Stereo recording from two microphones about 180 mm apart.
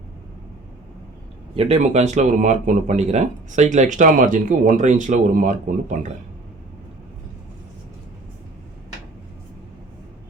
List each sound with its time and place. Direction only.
1.5 s speech: 35° right (ahead or behind)